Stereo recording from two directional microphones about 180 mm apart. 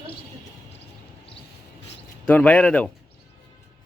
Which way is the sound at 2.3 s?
5° left (ahead or behind).